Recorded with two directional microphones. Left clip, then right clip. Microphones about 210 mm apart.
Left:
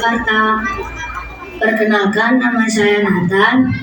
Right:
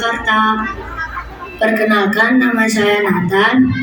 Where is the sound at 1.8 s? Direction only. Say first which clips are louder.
Right 1 dB; 55° right (ahead or behind).